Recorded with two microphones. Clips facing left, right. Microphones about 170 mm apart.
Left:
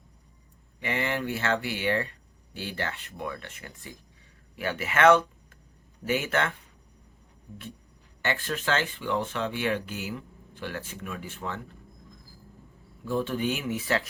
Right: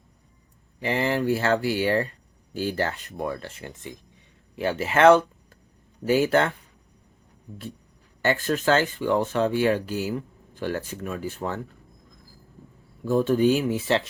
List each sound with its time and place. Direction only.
0.8 s speech: 30° right (ahead or behind)
8.2 s speech: 40° right (ahead or behind)
13.1 s speech: 40° right (ahead or behind)